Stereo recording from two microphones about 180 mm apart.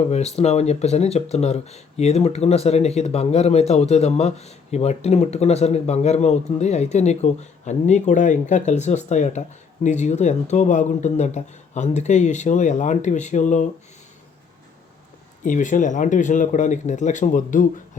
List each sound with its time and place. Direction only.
0.1 s speech: 35° left (ahead or behind)
15.4 s speech: 45° left (ahead or behind)